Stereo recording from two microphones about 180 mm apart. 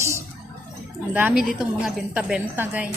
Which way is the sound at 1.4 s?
Centre (ahead or behind).